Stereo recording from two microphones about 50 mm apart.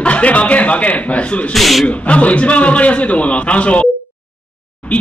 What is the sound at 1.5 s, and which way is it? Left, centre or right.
Speech, centre.